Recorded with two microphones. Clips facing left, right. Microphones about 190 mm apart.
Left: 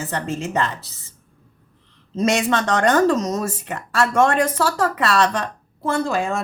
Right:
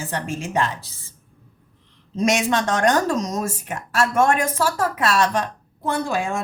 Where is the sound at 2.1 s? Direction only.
10° right (ahead or behind).